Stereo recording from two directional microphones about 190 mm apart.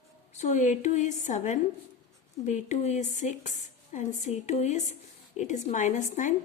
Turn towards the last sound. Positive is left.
turn(degrees=40)  # may be behind; listen again after turning